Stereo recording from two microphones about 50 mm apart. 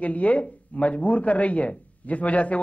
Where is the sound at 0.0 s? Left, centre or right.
Left.